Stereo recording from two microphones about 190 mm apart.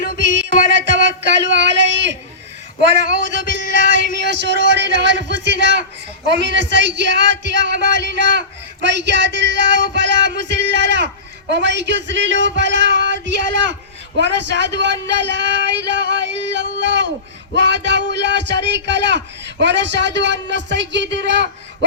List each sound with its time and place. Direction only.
0.2 s music: 70° right (ahead or behind)
2.8 s speech: 65° right (ahead or behind)